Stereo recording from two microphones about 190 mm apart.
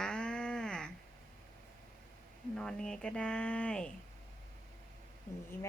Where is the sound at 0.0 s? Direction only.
5° left (ahead or behind).